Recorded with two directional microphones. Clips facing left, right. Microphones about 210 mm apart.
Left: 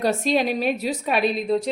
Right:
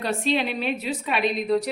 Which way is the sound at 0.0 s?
40° left (ahead or behind).